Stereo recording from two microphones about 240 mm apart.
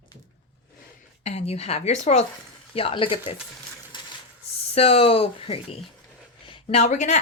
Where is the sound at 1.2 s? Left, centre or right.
Left.